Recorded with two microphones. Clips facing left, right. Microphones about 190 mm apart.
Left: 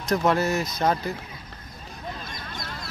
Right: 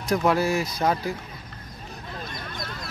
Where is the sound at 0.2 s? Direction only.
10° right (ahead or behind).